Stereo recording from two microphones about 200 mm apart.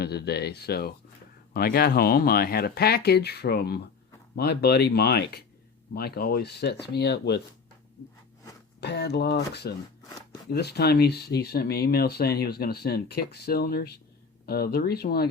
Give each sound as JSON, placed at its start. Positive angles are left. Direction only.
{"t": 0.0, "sound": "speech", "side_deg": 55}
{"t": 8.8, "sound": "speech", "side_deg": 55}